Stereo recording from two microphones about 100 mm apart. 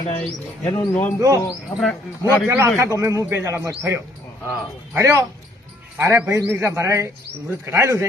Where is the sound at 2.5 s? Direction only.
25° right (ahead or behind).